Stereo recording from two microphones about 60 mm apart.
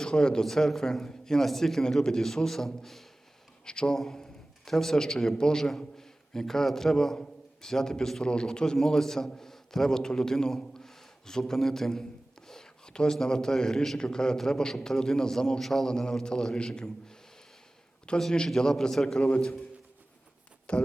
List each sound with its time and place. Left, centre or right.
0.0 s a man's voice: centre
18.2 s a man's voice: centre
20.7 s a man's voice: centre